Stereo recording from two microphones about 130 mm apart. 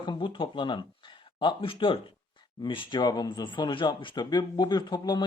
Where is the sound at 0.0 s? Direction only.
40° left (ahead or behind).